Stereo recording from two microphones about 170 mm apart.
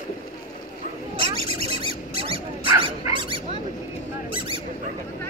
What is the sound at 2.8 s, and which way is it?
Dog, 30° right (ahead or behind).